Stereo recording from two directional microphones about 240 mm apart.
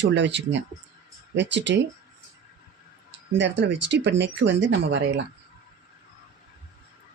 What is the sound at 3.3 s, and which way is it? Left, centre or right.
Speech, right.